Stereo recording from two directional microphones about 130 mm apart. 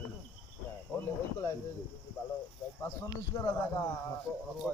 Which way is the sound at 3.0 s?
30° left (ahead or behind).